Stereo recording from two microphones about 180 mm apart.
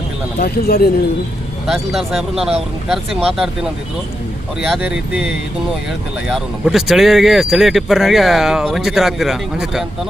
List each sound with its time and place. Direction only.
0.3 s speech: 60° left (ahead or behind)
1.6 s speech: centre (ahead or behind)
4.7 s speech: 5° right (ahead or behind)